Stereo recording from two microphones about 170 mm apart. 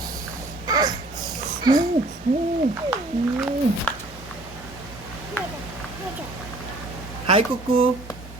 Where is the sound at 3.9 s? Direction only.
10° left (ahead or behind).